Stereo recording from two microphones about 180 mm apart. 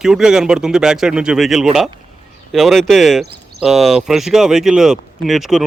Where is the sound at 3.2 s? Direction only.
65° right (ahead or behind).